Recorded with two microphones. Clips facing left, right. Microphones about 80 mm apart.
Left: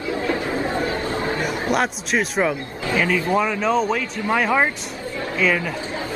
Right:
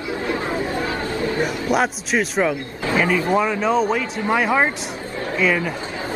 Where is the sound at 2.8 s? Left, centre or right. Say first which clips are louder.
Right 2 dB; right.